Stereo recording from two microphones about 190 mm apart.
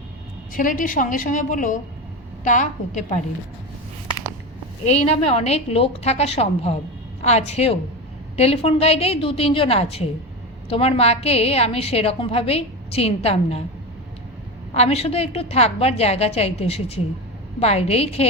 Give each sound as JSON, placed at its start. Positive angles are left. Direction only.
{"t": 0.5, "sound": "a woman's voice", "side_deg": 45}
{"t": 4.9, "sound": "a woman's voice", "side_deg": 35}
{"t": 14.7, "sound": "a woman's voice", "side_deg": 35}